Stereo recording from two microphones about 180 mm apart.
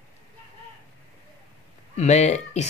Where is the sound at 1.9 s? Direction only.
40° left (ahead or behind).